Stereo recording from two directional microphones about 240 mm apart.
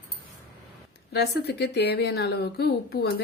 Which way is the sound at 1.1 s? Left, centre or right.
Left.